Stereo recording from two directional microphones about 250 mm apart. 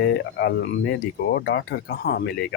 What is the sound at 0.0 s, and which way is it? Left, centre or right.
Speech, left.